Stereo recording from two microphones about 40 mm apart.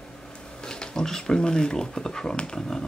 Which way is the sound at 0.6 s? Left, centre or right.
Centre.